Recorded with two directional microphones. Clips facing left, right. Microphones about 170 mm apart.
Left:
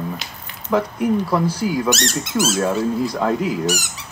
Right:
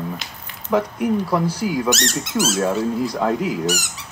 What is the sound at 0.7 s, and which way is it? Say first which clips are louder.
Speech: left 1 dB; 15° right (ahead or behind).